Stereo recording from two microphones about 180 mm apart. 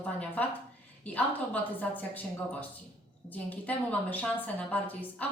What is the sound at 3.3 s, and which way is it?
A woman's voice, 10° left (ahead or behind).